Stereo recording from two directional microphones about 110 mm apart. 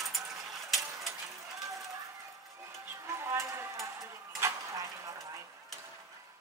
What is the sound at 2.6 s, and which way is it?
Music, 30° right (ahead or behind).